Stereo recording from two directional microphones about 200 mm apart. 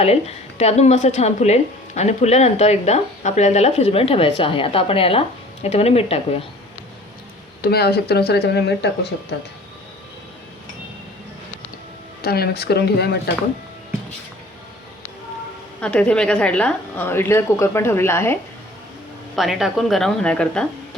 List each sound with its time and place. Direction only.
0.0 s speech: 30° left (ahead or behind)
7.6 s speech: 50° left (ahead or behind)
12.2 s speech: 50° left (ahead or behind)
15.8 s a woman's voice: 5° left (ahead or behind)
19.4 s a woman's voice: centre (ahead or behind)